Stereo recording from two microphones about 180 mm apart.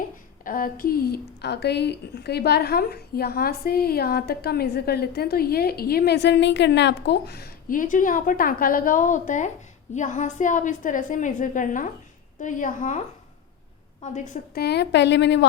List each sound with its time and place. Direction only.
0.4 s a woman's voice: 50° left (ahead or behind)
14.0 s a woman's voice: 40° left (ahead or behind)
14.5 s a woman's voice: 65° left (ahead or behind)